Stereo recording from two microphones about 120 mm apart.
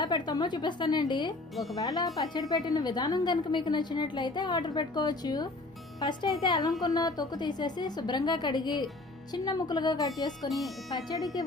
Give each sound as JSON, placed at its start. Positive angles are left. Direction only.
{"t": 0.0, "sound": "a woman's voice", "side_deg": 35}